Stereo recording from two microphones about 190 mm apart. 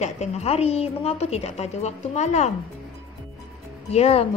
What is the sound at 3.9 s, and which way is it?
Speech, 30° left (ahead or behind).